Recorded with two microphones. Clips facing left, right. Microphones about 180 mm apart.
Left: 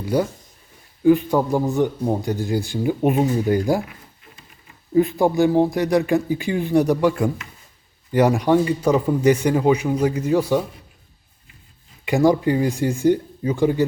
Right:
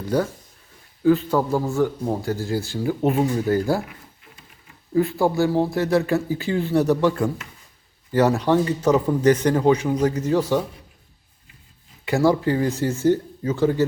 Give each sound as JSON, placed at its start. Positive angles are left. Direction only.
{"t": 0.0, "sound": "a man's voice", "side_deg": 10}
{"t": 4.9, "sound": "a man's voice", "side_deg": 20}
{"t": 12.0, "sound": "a man's voice", "side_deg": 15}